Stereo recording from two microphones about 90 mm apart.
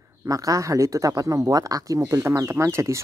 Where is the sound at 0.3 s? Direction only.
40° right (ahead or behind).